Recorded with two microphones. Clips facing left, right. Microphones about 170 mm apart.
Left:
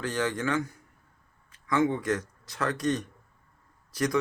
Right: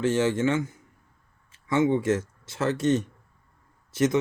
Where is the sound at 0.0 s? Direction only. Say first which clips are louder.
Right 7 dB; 25° right (ahead or behind).